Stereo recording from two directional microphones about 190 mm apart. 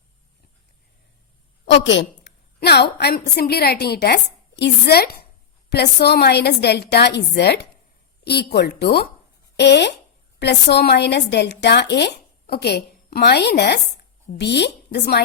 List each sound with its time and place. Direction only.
1.6 s a woman's voice: 70° left (ahead or behind)